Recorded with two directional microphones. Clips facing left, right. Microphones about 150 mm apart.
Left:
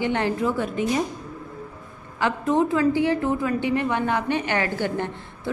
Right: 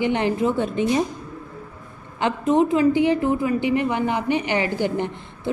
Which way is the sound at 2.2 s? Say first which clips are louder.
Right 3 dB; 20° right (ahead or behind).